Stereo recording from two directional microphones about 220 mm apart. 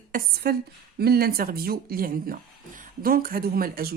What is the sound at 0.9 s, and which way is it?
Speech, 45° right (ahead or behind).